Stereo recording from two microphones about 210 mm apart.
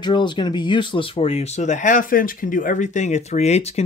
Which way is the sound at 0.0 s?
20° left (ahead or behind).